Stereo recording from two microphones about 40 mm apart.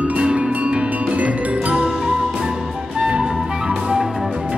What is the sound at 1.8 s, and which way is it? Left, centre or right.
Music, centre.